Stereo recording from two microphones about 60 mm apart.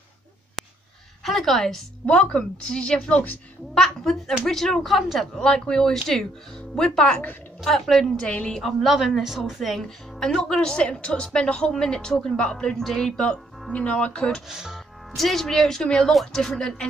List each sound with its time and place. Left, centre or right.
1.2 s speech: centre
3.7 s a woman's voice: centre
5.4 s a woman's voice: centre
8.3 s speech: centre
8.6 s a woman's voice: centre
14.5 s speech: centre
15.1 s speech: centre